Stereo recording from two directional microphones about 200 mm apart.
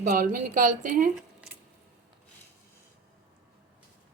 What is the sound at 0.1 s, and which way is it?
A woman's voice, 45° right (ahead or behind).